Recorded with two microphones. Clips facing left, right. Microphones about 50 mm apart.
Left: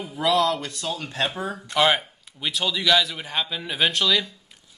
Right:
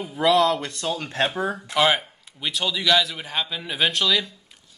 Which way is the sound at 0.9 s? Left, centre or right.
Right.